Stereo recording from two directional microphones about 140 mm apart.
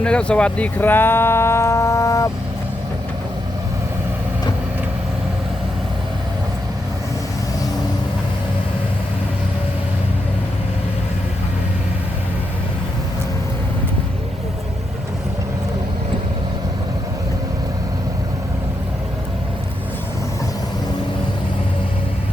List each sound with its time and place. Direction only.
0.0 s speech: 5° left (ahead or behind); by 2.3 s 20° left (ahead or behind)